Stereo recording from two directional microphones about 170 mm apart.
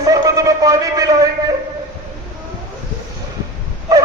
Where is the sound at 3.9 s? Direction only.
20° right (ahead or behind).